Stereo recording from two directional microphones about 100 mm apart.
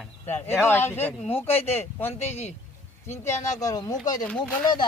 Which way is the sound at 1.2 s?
85° left.